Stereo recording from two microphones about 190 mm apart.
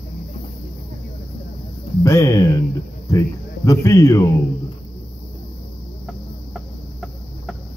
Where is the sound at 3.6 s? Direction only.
15° left (ahead or behind).